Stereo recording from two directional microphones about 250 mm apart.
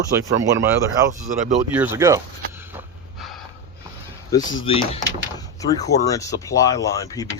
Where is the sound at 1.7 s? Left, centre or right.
Centre.